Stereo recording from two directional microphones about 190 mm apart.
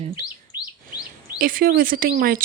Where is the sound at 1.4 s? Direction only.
45° right (ahead or behind).